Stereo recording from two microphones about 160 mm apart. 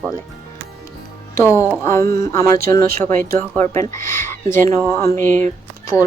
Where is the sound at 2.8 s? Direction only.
15° left (ahead or behind).